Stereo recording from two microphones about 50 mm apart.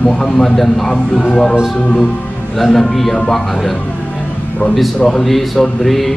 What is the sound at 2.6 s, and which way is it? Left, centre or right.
Speech, centre.